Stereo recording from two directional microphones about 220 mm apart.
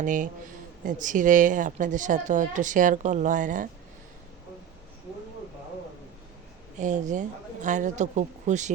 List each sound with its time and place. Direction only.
0.0 s speech: 35° right (ahead or behind)
6.7 s speech: 35° right (ahead or behind)